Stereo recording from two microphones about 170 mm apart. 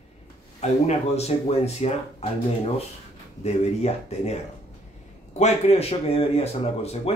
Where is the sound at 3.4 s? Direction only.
40° left (ahead or behind).